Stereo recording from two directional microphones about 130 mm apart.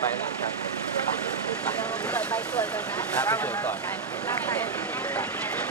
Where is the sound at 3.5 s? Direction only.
25° left (ahead or behind).